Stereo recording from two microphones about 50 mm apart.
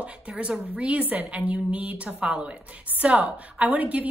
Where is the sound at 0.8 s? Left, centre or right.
Right.